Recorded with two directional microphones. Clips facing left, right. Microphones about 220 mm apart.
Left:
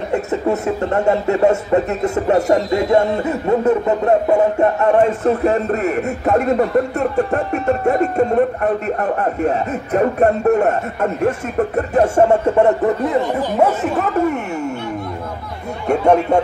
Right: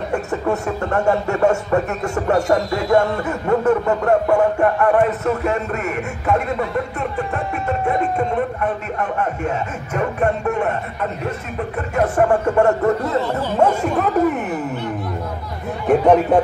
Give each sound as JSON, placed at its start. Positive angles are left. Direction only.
{"t": 0.1, "sound": "speech", "side_deg": 20}
{"t": 11.9, "sound": "speech", "side_deg": 25}
{"t": 15.9, "sound": "speech", "side_deg": -5}